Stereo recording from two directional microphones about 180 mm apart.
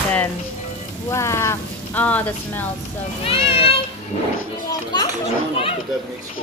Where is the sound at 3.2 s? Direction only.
30° left (ahead or behind).